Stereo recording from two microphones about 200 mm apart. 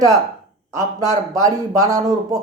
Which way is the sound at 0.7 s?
15° right (ahead or behind).